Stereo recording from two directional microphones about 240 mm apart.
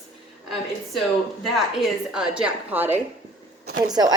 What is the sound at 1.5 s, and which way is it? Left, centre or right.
A woman's voice, centre.